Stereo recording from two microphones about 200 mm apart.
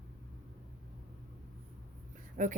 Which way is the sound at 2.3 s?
40° right (ahead or behind).